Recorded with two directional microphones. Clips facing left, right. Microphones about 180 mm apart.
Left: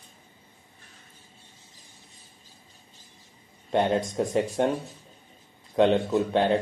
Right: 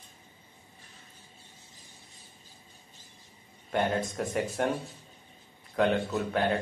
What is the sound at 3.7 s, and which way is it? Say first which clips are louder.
Speech: left 5 dB; 25° left (ahead or behind).